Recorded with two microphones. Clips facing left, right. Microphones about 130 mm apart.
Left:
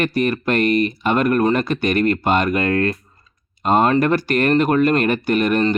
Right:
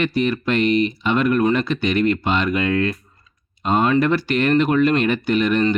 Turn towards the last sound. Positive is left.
turn(degrees=50)  # may be behind; listen again after turning